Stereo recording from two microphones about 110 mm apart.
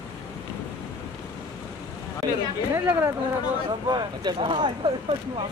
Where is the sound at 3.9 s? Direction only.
40° right (ahead or behind).